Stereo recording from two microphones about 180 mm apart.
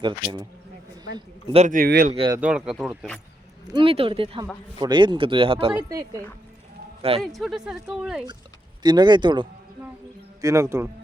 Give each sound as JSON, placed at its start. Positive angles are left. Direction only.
{"t": 0.0, "sound": "speech", "side_deg": -25}
{"t": 1.5, "sound": "speech", "side_deg": -45}
{"t": 2.0, "sound": "speech", "side_deg": -30}
{"t": 2.4, "sound": "speech", "side_deg": -5}
{"t": 3.7, "sound": "speech", "side_deg": -30}
{"t": 5.7, "sound": "speech", "side_deg": -20}
{"t": 7.2, "sound": "speech", "side_deg": 0}
{"t": 8.8, "sound": "speech", "side_deg": -25}